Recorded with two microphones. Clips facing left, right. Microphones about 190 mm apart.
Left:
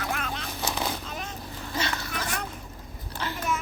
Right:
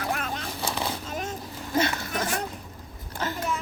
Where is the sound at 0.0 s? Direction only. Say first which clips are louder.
Right 2 dB; 40° right (ahead or behind).